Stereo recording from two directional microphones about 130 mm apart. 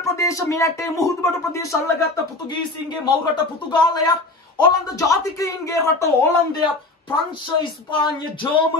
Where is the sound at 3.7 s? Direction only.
35° left (ahead or behind).